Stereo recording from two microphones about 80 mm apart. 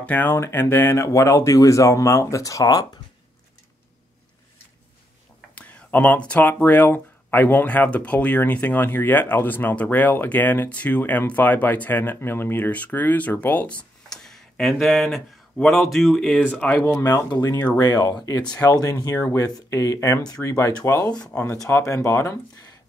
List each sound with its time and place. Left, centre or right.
0.0 s speech: left
1.0 s speech: left
5.5 s speech: centre
14.0 s a sound: centre
15.5 s speech: centre
16.7 s speech: left
17.7 s speech: left
21.1 s speech: centre
21.4 s speech: left